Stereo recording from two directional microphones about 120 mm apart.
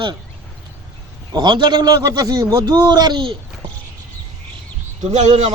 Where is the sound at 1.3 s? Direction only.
40° right (ahead or behind).